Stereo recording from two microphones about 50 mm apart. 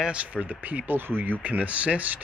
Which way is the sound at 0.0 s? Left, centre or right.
Right.